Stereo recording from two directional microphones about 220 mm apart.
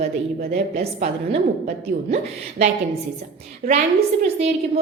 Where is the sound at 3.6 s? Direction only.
35° right (ahead or behind).